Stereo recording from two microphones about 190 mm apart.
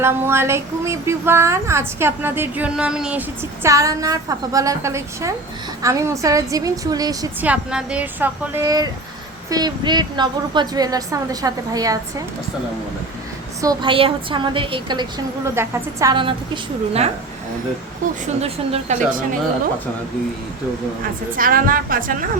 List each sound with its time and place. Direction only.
0.0 s a woman's voice: 15° right (ahead or behind)
7.4 s a woman's voice: 5° right (ahead or behind)
13.6 s a woman's voice: 20° right (ahead or behind)
18.3 s a woman's voice: 30° right (ahead or behind)
21.3 s a woman's voice: 45° right (ahead or behind)